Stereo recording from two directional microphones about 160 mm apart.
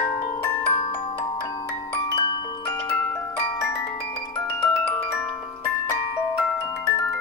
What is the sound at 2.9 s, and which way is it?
Music, 10° left (ahead or behind).